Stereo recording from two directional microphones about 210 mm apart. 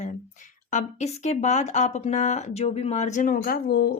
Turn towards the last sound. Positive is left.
turn(degrees=50)  # may be behind; listen again after turning